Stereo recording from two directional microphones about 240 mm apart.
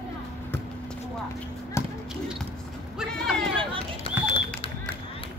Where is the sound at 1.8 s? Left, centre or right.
Centre.